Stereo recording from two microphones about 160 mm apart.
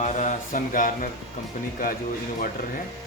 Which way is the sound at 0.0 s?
50° left (ahead or behind).